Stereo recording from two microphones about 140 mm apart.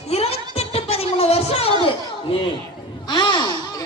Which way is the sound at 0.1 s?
45° left (ahead or behind).